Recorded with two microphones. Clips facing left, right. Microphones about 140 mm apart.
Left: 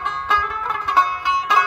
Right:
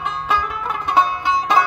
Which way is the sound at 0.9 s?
25° right (ahead or behind).